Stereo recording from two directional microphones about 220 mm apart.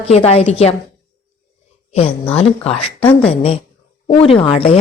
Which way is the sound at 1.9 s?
25° left (ahead or behind).